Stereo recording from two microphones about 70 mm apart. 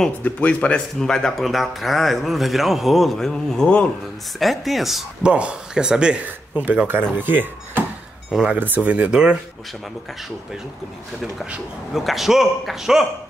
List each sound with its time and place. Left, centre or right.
0.2 s speech: left
0.9 s a man's voice: centre
5.2 s speech: centre
8.3 s speech: centre
8.5 s speech: right
11.9 s a man's voice: centre